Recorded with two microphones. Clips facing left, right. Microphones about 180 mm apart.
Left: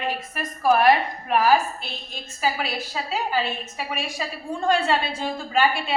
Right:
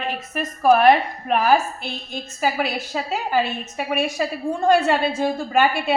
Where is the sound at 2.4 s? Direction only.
50° right (ahead or behind).